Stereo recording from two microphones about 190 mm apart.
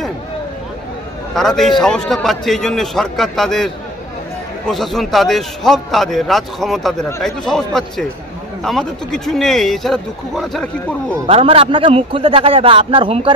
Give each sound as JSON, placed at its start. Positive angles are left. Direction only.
{"t": 1.3, "sound": "speech", "side_deg": 0}
{"t": 11.2, "sound": "a man's voice", "side_deg": -30}